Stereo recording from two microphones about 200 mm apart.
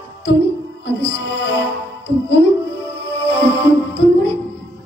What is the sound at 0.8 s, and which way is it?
Music, 60° left (ahead or behind).